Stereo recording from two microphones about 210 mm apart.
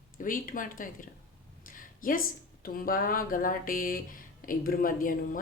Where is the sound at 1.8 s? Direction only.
40° left (ahead or behind).